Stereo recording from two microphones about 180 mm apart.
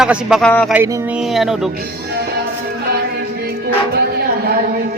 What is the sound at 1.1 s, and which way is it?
Speech, centre (ahead or behind).